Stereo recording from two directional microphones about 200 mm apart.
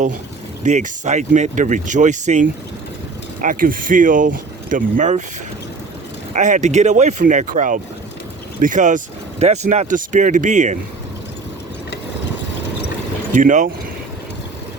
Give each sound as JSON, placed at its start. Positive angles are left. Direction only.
{"t": 0.6, "sound": "speech", "side_deg": -35}
{"t": 6.3, "sound": "speech", "side_deg": -40}
{"t": 13.3, "sound": "speech", "side_deg": -40}